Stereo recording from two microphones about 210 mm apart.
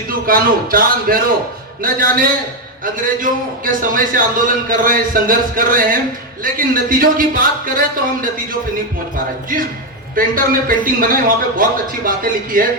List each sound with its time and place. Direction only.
0.1 s a man's voice: 45° right (ahead or behind)